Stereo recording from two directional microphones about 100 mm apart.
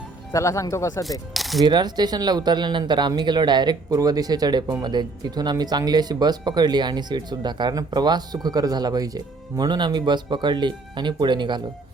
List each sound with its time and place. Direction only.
0.3 s speech: 30° left (ahead or behind)
1.3 s speech: centre (ahead or behind)
1.6 s speech: 45° right (ahead or behind)